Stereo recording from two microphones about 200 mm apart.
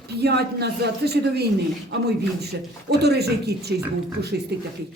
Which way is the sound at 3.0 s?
55° right (ahead or behind).